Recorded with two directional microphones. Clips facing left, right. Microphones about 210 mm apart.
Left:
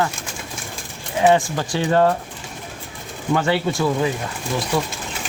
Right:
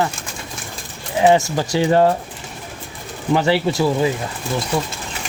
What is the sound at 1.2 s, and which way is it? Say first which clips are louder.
Speech: right 2 dB; 20° right (ahead or behind).